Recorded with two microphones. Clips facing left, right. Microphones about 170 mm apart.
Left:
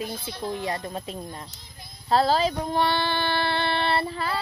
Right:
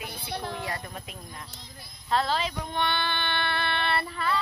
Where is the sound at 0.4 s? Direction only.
20° left (ahead or behind).